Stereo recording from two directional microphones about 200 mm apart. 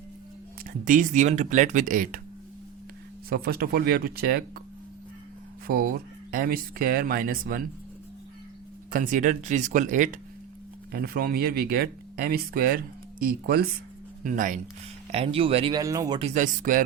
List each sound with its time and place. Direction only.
0.6 s speech: 40° right (ahead or behind)
3.2 s speech: 50° right (ahead or behind)
5.6 s speech: 45° right (ahead or behind)
8.9 s speech: 40° right (ahead or behind)
15.1 s speech: 30° right (ahead or behind)
16.2 s speech: 40° right (ahead or behind)